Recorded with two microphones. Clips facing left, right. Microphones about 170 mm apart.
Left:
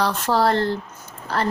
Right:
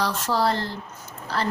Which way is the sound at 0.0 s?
60° left (ahead or behind).